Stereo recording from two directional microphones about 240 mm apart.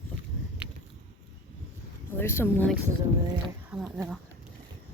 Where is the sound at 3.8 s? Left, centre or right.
Centre.